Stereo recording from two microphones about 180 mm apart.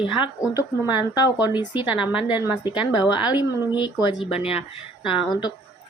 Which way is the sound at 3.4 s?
25° left (ahead or behind).